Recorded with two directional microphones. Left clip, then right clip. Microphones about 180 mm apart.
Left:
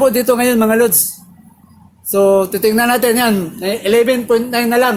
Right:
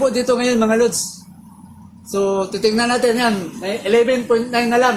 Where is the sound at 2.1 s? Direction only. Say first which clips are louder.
Left 7 dB; 45° left (ahead or behind).